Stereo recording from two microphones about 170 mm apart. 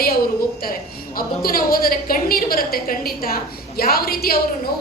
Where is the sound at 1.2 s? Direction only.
60° left (ahead or behind).